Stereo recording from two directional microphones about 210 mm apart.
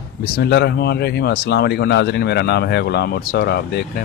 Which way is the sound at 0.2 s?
50° left (ahead or behind).